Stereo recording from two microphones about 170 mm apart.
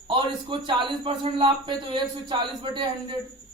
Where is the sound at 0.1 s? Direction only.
30° right (ahead or behind).